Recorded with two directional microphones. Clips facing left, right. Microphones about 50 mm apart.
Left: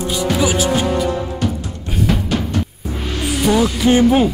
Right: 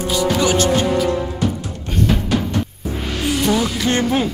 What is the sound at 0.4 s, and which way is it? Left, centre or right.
Speech, centre.